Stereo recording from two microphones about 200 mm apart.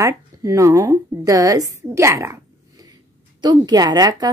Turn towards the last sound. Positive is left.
turn(degrees=-20)  # may be behind; listen again after turning